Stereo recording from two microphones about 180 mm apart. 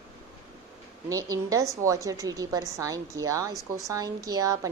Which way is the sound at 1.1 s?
20° right (ahead or behind).